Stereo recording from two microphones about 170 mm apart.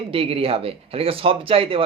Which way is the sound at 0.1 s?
35° right (ahead or behind).